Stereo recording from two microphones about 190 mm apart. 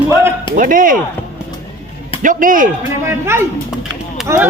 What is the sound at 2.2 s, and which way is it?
Speech, 45° right (ahead or behind).